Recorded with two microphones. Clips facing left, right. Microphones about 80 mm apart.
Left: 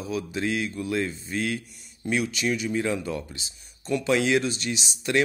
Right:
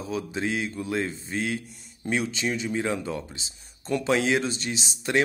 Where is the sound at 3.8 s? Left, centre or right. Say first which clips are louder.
Even; right.